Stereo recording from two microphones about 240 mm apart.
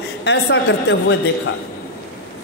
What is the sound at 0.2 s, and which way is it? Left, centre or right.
Speech, left.